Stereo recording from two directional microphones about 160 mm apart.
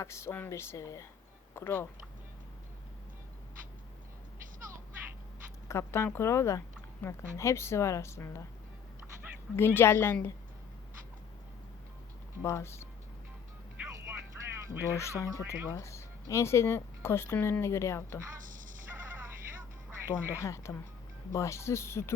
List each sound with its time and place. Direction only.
0.0 s speech: 15° left (ahead or behind)
5.6 s speech: 15° left (ahead or behind)
9.6 s speech: 15° left (ahead or behind)
12.4 s speech: 15° left (ahead or behind)
13.8 s a sound: 15° right (ahead or behind)
14.9 s speech: 15° left (ahead or behind)
15.3 s ratchet: 20° right (ahead or behind)
15.7 s speech: 20° left (ahead or behind)
18.4 s a sound: 55° right (ahead or behind)
20.4 s speech: 20° left (ahead or behind)